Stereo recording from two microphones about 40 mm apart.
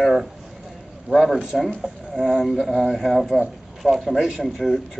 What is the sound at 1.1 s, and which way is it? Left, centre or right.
Speech, centre.